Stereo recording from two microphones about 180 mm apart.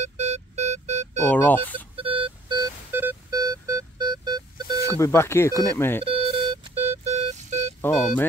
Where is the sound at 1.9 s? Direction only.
30° right (ahead or behind).